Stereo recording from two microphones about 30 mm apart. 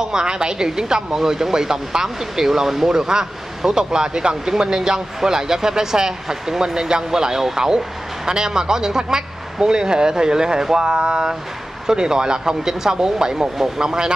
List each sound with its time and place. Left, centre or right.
0.0 s speech: right